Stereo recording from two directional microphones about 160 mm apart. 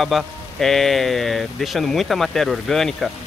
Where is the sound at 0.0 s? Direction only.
Centre (ahead or behind).